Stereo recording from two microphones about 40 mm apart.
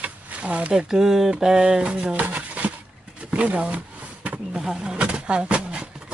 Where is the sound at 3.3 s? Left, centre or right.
Right.